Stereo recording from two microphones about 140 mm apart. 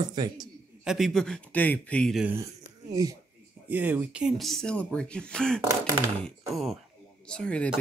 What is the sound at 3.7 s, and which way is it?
Speech, 10° right (ahead or behind).